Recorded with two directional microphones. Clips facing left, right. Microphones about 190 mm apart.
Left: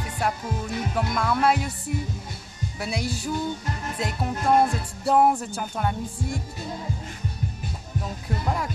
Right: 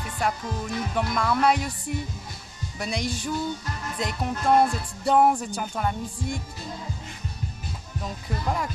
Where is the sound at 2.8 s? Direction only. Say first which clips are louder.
Even; 5° left (ahead or behind).